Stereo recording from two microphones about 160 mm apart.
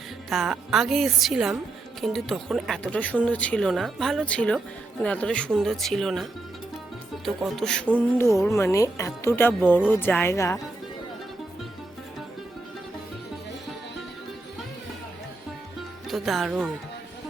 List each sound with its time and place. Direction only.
0.3 s speech: centre (ahead or behind)
7.3 s speech: centre (ahead or behind)
7.9 s speech: 15° left (ahead or behind)
16.0 s speech: centre (ahead or behind)